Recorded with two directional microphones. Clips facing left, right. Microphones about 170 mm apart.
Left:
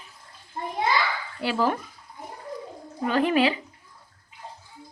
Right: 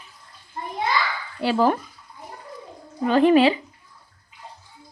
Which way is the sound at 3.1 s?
30° right (ahead or behind).